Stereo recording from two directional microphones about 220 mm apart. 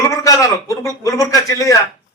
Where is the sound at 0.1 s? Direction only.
15° left (ahead or behind).